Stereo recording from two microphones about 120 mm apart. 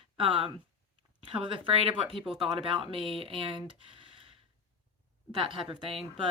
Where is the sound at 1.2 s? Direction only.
45° right (ahead or behind).